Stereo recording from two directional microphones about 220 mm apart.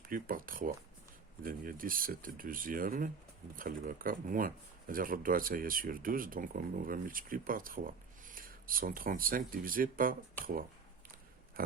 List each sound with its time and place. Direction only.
0.0 s speech: 40° right (ahead or behind)